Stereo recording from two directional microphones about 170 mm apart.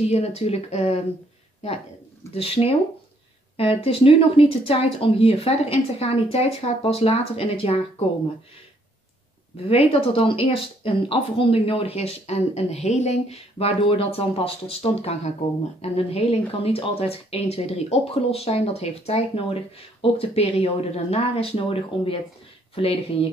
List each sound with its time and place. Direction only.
0.1 s speech: 40° left (ahead or behind)
2.3 s speech: 35° left (ahead or behind)
9.7 s speech: 35° left (ahead or behind)